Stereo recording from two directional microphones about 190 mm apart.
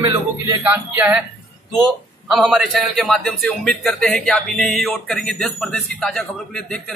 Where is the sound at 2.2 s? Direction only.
Centre (ahead or behind).